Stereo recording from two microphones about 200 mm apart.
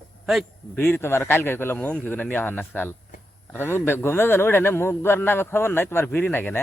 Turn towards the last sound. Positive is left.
turn(degrees=10)  # may be behind; listen again after turning